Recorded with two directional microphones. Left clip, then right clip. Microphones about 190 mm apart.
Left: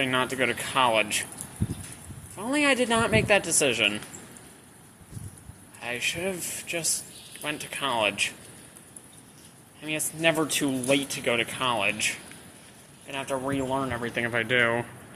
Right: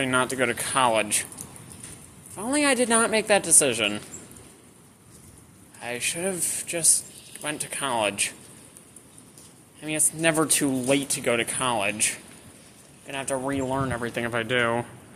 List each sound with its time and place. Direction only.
0.0 s speech: 25° right (ahead or behind)
2.3 s speech: 25° right (ahead or behind)
5.8 s speech: 25° right (ahead or behind)
9.8 s speech: 25° right (ahead or behind)